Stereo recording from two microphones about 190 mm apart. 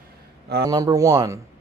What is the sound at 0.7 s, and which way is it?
Speech, 20° right (ahead or behind).